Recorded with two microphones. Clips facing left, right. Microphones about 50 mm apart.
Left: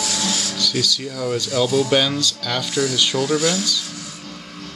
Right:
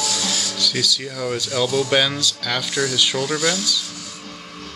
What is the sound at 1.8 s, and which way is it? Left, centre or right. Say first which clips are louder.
Speech: left 1 dB; centre.